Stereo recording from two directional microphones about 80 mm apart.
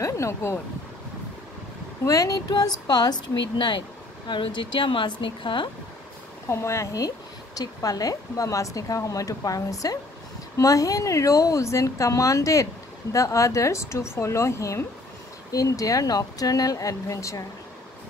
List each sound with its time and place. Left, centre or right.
0.0 s speech: left
2.0 s speech: left
6.5 s speech: left
7.5 s a woman's voice: left